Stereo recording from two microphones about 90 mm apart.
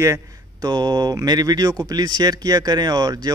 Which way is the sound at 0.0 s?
40° right (ahead or behind).